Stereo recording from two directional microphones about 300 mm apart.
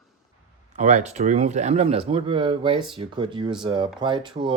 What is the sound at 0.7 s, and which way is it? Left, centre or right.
Speech, right.